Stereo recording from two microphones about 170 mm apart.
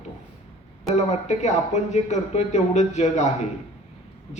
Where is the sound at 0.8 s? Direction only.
45° left (ahead or behind).